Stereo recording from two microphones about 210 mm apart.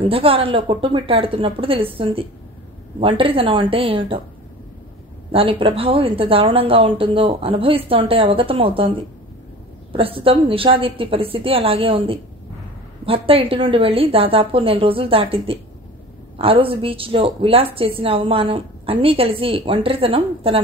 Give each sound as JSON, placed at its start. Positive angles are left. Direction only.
{"t": 0.0, "sound": "a woman's voice", "side_deg": -25}
{"t": 5.3, "sound": "a woman's voice", "side_deg": -25}
{"t": 9.9, "sound": "a woman's voice", "side_deg": -25}